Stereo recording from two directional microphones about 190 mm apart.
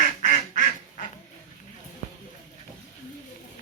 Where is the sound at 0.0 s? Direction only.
40° left (ahead or behind).